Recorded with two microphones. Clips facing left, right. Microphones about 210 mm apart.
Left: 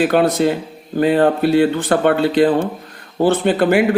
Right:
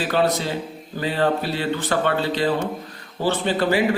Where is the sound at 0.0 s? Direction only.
50° left (ahead or behind).